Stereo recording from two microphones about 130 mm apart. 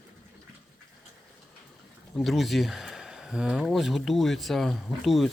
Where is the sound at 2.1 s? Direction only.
Centre (ahead or behind).